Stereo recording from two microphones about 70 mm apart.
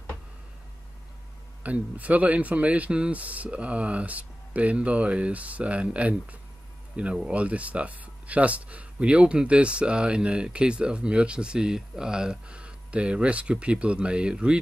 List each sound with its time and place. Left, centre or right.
1.6 s speech: right